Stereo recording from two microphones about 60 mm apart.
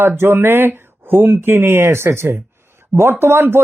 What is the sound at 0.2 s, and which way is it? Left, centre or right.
Speech, right.